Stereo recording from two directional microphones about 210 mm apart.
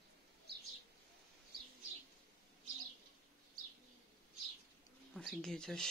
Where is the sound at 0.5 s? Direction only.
50° right (ahead or behind).